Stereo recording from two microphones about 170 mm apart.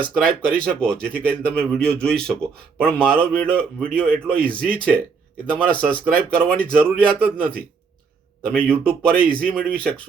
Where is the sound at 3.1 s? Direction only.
60° right (ahead or behind).